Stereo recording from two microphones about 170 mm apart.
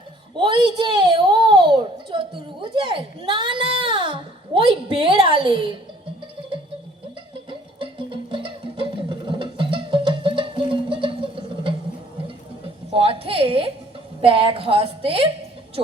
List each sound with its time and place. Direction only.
0.3 s a child's voice: 30° right (ahead or behind)
7.8 s music: 30° right (ahead or behind)
12.9 s a sound: 35° right (ahead or behind)
14.2 s a woman's voice: 35° right (ahead or behind)